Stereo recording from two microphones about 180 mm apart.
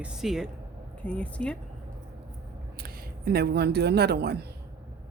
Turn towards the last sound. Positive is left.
turn(degrees=-65)  # may be behind; listen again after turning